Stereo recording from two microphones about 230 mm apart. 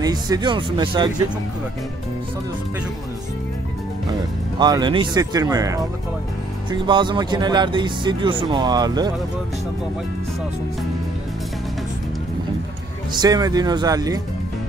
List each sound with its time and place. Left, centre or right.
0.0 s speech: centre
4.6 s speech: centre
13.2 s speech: centre